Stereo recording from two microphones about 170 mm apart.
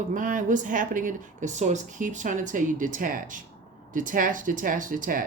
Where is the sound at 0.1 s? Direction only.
50° right (ahead or behind).